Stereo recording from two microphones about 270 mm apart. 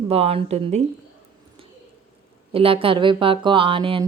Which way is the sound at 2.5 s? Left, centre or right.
Centre.